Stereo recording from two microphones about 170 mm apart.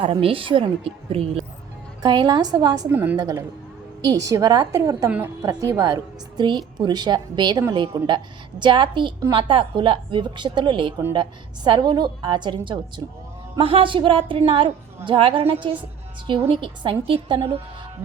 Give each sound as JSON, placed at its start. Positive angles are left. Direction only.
{"t": 0.0, "sound": "a woman's voice", "side_deg": -30}
{"t": 2.9, "sound": "a woman's voice", "side_deg": -10}
{"t": 3.2, "sound": "a woman's voice", "side_deg": -20}